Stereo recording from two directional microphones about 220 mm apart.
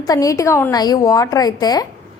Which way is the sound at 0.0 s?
15° left (ahead or behind).